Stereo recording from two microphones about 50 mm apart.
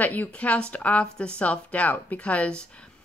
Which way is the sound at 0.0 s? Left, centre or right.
Left.